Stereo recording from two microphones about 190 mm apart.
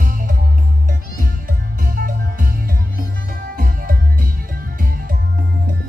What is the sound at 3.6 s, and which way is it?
Music, 50° right (ahead or behind).